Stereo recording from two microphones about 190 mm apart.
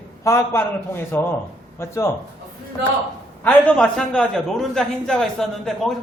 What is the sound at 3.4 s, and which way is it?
A man's voice, 5° left (ahead or behind).